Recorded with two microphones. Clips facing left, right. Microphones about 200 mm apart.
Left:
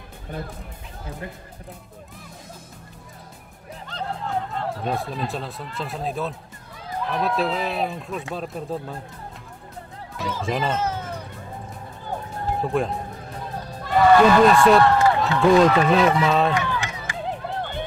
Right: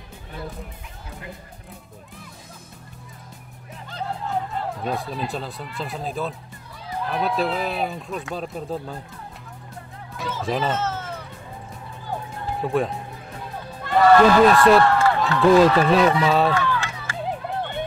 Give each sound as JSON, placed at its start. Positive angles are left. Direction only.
{"t": 4.8, "sound": "speech", "side_deg": 0}
{"t": 10.1, "sound": "speech", "side_deg": 0}
{"t": 10.8, "sound": "music", "side_deg": 15}
{"t": 12.6, "sound": "speech", "side_deg": 0}
{"t": 14.1, "sound": "speech", "side_deg": 0}
{"t": 15.0, "sound": "a sound", "side_deg": 15}
{"t": 15.4, "sound": "speech", "side_deg": 0}
{"t": 16.5, "sound": "run", "side_deg": 15}